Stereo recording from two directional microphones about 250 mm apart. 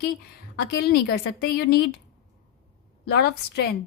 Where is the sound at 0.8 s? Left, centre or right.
Left.